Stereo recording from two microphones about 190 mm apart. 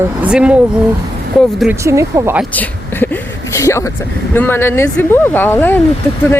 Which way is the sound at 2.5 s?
10° left (ahead or behind).